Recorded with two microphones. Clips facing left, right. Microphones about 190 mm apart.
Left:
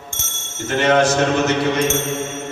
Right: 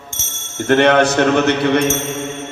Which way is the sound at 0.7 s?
60° right (ahead or behind).